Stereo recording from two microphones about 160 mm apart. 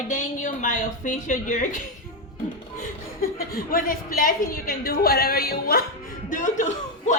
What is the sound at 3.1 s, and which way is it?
Speech, 60° left (ahead or behind).